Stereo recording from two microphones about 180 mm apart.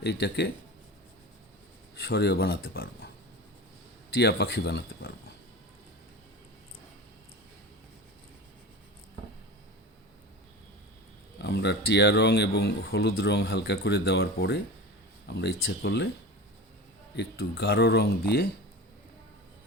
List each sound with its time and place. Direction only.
0.0 s speech: 65° left (ahead or behind)
2.0 s speech: 65° left (ahead or behind)
4.1 s speech: 65° left (ahead or behind)
11.3 s speech: 70° left (ahead or behind)
17.2 s speech: 65° left (ahead or behind)